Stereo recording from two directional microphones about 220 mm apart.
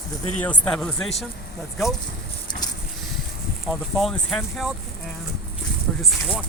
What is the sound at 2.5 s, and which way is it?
Vehicle, 20° left (ahead or behind).